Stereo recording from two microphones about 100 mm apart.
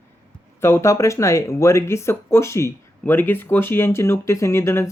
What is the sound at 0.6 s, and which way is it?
Speech, 25° left (ahead or behind).